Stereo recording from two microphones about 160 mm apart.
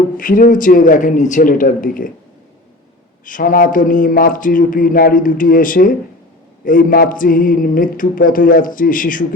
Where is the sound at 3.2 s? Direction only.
60° left (ahead or behind).